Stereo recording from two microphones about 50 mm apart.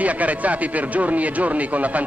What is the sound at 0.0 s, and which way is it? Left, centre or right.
A man's voice, right.